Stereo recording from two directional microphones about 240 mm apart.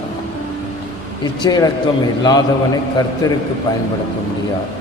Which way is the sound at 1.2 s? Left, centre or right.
Centre.